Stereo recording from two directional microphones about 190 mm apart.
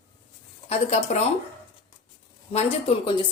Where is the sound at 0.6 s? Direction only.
35° left (ahead or behind).